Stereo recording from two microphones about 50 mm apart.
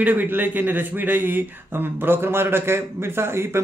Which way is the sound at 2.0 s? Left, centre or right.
Right.